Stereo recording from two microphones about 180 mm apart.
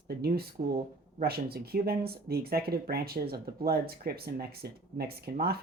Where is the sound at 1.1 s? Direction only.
60° right (ahead or behind).